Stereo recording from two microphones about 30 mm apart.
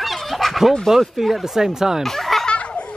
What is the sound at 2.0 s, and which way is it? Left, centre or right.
Snicker, centre.